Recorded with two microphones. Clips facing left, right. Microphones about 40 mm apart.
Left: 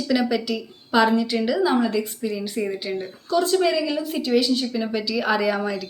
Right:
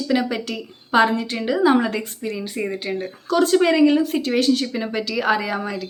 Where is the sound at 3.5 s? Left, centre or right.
Right.